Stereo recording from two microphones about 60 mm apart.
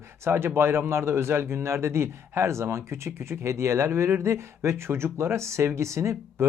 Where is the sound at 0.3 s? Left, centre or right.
Right.